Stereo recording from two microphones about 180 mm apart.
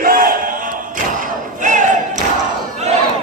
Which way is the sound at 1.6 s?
45° right (ahead or behind).